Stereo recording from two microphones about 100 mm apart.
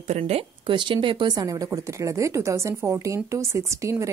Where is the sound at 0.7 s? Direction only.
50° right (ahead or behind).